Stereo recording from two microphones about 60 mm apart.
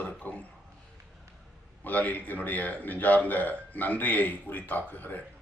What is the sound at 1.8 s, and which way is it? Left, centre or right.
A man's voice, left.